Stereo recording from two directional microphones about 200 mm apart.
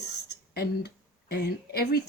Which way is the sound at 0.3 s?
55° left (ahead or behind).